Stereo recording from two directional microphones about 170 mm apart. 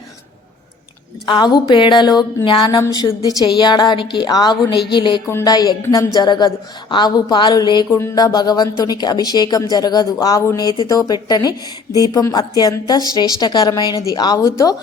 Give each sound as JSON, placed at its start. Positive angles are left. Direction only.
{"t": 1.2, "sound": "speech", "side_deg": 25}